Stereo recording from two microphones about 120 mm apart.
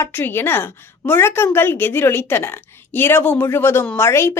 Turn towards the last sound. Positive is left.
turn(degrees=20)  # may be behind; listen again after turning